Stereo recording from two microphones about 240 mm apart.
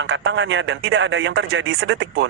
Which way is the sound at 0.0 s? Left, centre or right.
Right.